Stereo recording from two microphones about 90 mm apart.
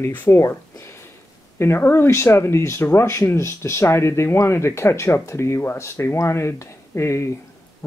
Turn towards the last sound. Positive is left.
turn(degrees=30)  # may be behind; listen again after turning